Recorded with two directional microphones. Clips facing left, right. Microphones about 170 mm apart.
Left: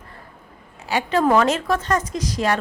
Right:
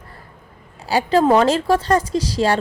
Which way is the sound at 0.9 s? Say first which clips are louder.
Right 4 dB; 35° right (ahead or behind).